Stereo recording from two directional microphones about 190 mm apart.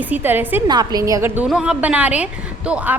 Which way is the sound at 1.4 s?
5° right (ahead or behind).